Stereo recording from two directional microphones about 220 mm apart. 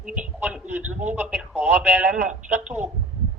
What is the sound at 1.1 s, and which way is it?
Speech, 5° right (ahead or behind).